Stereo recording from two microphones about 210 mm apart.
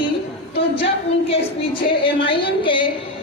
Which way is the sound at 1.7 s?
25° left (ahead or behind).